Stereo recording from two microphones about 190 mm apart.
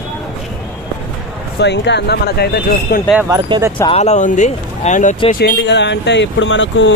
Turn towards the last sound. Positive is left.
turn(degrees=75)  # may be behind; listen again after turning